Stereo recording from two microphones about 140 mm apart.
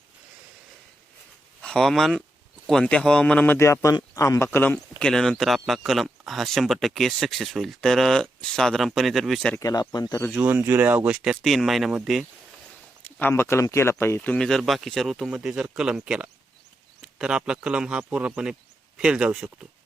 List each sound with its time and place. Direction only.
1.6 s a man's voice: 5° left (ahead or behind)
4.9 s speech: 5° left (ahead or behind)
9.6 s speech: 25° left (ahead or behind)
10.3 s speech: 10° right (ahead or behind)
13.1 s a man's voice: 15° left (ahead or behind); by 19.5 s 5° right (ahead or behind)